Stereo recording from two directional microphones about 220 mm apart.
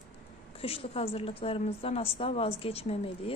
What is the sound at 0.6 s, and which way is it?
A woman's voice, 25° left (ahead or behind).